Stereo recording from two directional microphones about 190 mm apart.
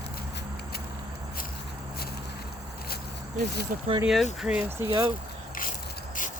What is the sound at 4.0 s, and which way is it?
Speech, centre (ahead or behind).